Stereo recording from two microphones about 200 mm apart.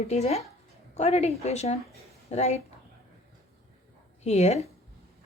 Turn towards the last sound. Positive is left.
turn(degrees=30)  # may be behind; listen again after turning